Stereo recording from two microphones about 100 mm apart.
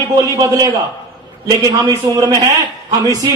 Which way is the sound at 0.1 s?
35° right (ahead or behind).